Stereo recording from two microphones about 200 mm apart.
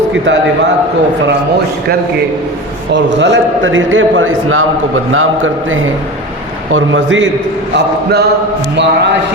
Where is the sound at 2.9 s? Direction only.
60° right (ahead or behind).